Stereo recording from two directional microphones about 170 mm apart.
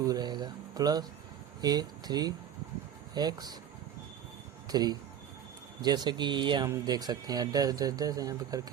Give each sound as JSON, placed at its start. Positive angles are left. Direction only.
{"t": 0.0, "sound": "speech", "side_deg": -25}
{"t": 4.7, "sound": "speech", "side_deg": -25}